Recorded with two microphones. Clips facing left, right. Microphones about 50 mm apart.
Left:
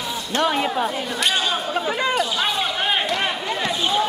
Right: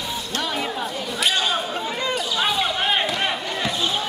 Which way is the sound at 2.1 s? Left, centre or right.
Centre.